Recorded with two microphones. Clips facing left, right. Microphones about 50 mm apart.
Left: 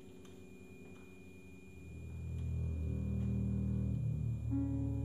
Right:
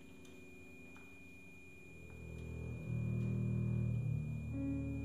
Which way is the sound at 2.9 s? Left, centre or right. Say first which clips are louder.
Left 1 dB; centre.